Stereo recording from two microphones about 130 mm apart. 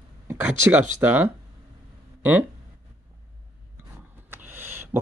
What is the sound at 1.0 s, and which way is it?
Speech, 15° right (ahead or behind).